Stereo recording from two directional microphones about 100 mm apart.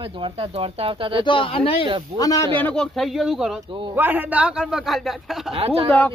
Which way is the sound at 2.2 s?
35° left (ahead or behind).